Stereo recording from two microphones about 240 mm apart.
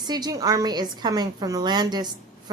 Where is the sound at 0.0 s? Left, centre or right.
Centre.